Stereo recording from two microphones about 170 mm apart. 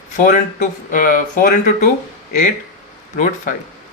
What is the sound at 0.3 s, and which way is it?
Speech, 50° left (ahead or behind).